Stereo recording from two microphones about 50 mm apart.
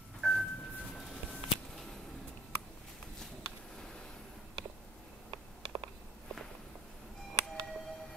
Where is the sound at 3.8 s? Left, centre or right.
Centre.